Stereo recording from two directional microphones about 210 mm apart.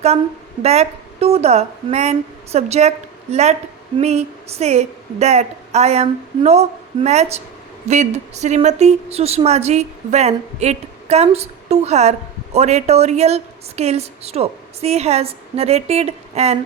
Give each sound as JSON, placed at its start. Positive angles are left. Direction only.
{"t": 0.6, "sound": "speech", "side_deg": -30}